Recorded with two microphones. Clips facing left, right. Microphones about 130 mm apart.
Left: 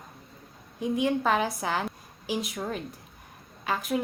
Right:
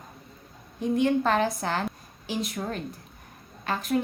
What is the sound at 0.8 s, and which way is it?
A woman's voice, 10° left (ahead or behind).